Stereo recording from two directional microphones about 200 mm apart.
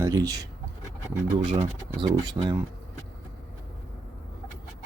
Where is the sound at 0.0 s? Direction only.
20° right (ahead or behind).